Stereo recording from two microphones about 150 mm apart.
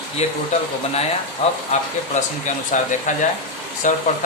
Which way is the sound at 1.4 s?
45° left (ahead or behind).